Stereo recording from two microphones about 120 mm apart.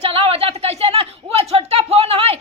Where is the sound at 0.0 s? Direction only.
55° right (ahead or behind).